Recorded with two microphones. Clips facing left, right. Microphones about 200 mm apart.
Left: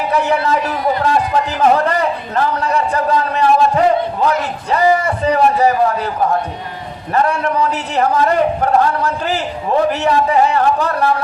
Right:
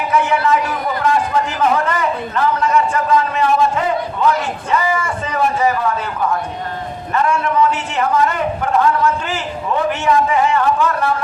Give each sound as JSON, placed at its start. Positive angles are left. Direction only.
{"t": 0.1, "sound": "speech", "side_deg": 35}
{"t": 1.0, "sound": "a sound", "side_deg": 35}
{"t": 4.7, "sound": "a man's voice", "side_deg": 35}
{"t": 7.1, "sound": "a man's voice", "side_deg": 35}